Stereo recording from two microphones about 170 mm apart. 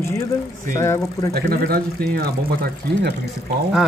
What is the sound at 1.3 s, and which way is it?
Speech, 65° right (ahead or behind).